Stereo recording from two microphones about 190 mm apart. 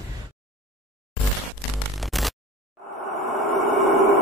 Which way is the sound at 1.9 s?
Centre (ahead or behind).